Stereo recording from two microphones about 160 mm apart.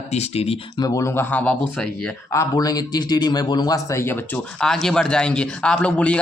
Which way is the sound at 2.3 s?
20° left (ahead or behind).